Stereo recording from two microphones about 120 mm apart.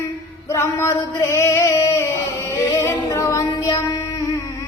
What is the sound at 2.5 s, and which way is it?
Music, 25° left (ahead or behind).